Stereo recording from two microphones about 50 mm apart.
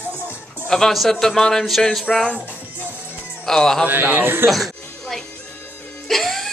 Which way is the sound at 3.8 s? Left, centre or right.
Right.